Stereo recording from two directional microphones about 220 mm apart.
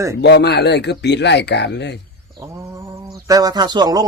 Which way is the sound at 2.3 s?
15° right (ahead or behind).